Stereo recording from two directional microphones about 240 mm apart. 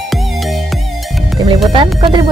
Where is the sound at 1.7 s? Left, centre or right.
Right.